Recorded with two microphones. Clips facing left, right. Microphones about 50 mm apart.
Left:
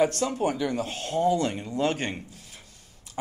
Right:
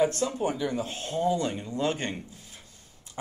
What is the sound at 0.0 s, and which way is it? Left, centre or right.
Speech, left.